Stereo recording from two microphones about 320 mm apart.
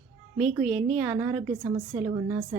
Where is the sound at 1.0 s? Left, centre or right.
Centre.